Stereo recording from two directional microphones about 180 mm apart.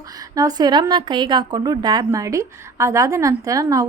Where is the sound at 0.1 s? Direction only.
20° right (ahead or behind).